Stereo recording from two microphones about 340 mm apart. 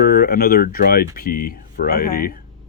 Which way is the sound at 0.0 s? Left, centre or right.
Left.